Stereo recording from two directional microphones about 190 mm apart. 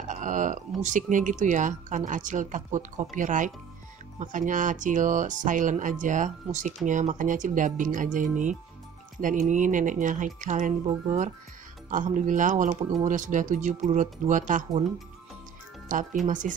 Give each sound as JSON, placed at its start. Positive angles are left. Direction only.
{"t": 0.1, "sound": "speech", "side_deg": -40}
{"t": 11.9, "sound": "speech", "side_deg": -40}
{"t": 15.9, "sound": "speech", "side_deg": -45}